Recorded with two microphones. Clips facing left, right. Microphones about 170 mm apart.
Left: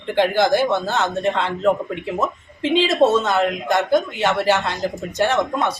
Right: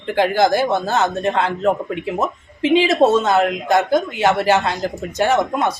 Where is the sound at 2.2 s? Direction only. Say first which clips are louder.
Right 2 dB; 15° right (ahead or behind).